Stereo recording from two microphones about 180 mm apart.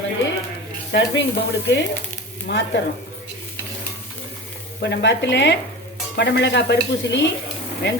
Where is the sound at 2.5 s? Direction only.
75° left (ahead or behind).